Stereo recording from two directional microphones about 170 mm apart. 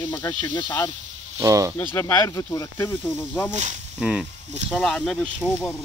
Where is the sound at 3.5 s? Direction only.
45° right (ahead or behind).